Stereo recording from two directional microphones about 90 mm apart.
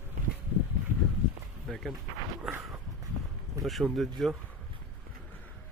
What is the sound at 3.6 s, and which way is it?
Speech, centre (ahead or behind).